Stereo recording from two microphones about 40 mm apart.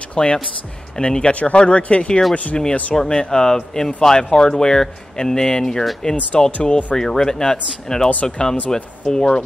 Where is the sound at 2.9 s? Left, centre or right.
Centre.